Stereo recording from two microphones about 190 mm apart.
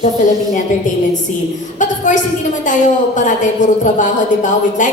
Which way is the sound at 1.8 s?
40° left (ahead or behind).